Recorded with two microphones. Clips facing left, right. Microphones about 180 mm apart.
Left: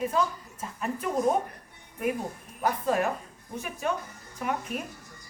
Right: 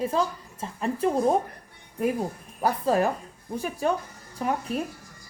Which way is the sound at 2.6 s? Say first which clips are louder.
Right 3 dB; 35° right (ahead or behind).